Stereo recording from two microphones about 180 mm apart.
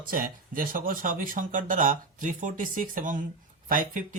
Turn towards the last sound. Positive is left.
turn(degrees=-50)  # may be behind; listen again after turning